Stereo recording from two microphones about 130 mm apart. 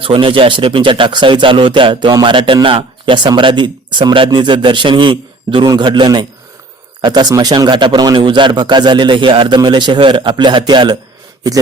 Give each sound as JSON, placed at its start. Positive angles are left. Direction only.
{"t": 0.0, "sound": "speech", "side_deg": -45}